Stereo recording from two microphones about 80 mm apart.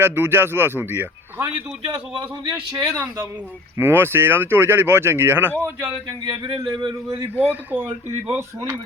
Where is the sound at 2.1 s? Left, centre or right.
Right.